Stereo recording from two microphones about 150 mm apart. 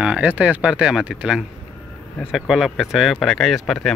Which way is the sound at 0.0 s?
5° right (ahead or behind).